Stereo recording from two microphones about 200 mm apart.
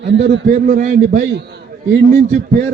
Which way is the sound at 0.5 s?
40° right (ahead or behind).